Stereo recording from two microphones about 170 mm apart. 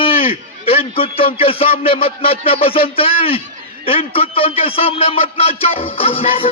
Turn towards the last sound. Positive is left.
turn(degrees=35)  # may be behind; listen again after turning